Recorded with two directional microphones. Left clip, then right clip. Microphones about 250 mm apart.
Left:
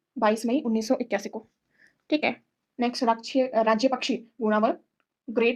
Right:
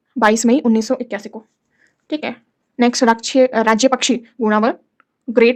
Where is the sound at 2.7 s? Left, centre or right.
Right.